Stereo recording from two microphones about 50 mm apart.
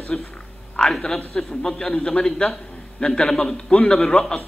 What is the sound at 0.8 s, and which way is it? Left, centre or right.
A man's voice, centre.